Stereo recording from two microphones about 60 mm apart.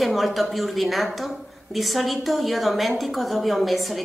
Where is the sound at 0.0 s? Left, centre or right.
Centre.